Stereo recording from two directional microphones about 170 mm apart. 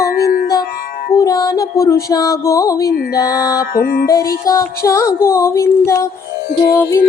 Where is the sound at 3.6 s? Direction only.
60° left (ahead or behind).